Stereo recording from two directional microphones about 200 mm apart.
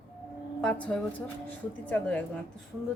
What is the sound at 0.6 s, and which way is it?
A woman's voice, 5° left (ahead or behind).